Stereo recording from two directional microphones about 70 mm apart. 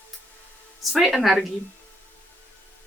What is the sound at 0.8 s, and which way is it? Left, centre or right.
Speech, centre.